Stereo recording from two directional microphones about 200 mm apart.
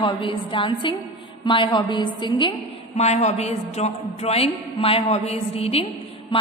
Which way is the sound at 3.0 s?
35° left (ahead or behind).